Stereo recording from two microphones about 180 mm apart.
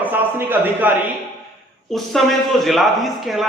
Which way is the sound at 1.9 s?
Centre (ahead or behind).